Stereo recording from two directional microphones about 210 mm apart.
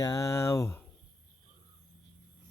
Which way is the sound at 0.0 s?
15° left (ahead or behind).